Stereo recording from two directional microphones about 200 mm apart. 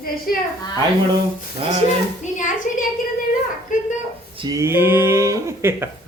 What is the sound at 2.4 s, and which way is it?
Speech, 40° left (ahead or behind).